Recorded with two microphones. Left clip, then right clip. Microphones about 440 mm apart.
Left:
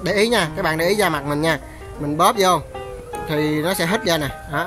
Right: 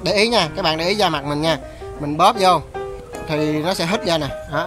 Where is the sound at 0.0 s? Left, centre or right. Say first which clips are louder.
Right 1 dB; centre.